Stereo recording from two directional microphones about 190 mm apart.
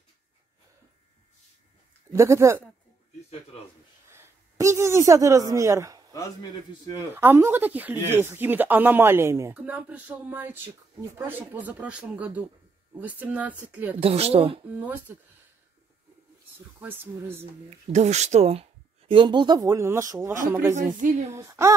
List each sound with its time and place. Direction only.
2.1 s speech: 15° right (ahead or behind)
4.1 s a woman's voice: 15° right (ahead or behind)
7.2 s speech: 10° right (ahead or behind)
13.9 s speech: 30° right (ahead or behind)
14.8 s speech: 10° right (ahead or behind)
16.8 s speech: 10° right (ahead or behind)
17.6 s speech: 35° right (ahead or behind); by 20.3 s 15° right (ahead or behind)
21.0 s speech: 40° right (ahead or behind)
21.3 s speech: 15° right (ahead or behind)